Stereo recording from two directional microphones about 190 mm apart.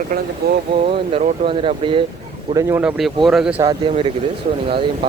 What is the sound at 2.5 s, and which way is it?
Speech, 15° right (ahead or behind).